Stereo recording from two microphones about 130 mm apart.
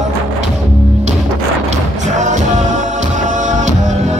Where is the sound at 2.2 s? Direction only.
65° right (ahead or behind).